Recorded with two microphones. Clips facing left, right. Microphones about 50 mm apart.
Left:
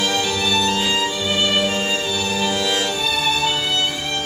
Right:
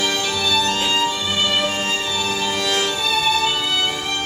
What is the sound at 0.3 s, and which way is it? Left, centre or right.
Music, centre.